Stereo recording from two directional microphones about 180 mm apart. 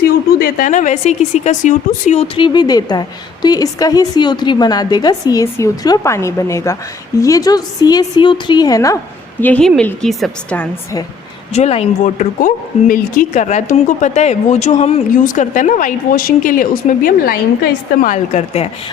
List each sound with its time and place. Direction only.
0.3 s speech: 45° left (ahead or behind); by 9.0 s 20° left (ahead or behind)
9.4 s a woman's voice: 5° left (ahead or behind)
11.5 s speech: 35° left (ahead or behind); by 17.4 s 50° left (ahead or behind)
18.0 s a woman's voice: 40° left (ahead or behind)